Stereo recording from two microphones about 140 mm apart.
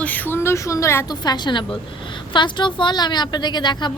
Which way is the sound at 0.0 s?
10° left (ahead or behind).